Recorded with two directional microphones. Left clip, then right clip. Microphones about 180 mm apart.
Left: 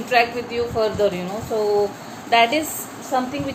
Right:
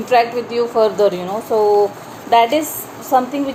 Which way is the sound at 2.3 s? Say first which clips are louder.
Right 4 dB; 30° right (ahead or behind).